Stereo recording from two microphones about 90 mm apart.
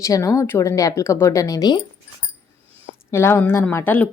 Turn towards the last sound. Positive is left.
turn(degrees=20)  # may be behind; listen again after turning